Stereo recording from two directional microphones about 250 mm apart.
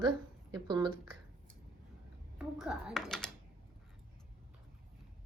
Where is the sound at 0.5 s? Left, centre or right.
Centre.